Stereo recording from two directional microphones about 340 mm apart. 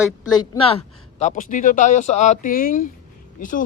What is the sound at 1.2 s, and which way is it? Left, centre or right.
Speech, left.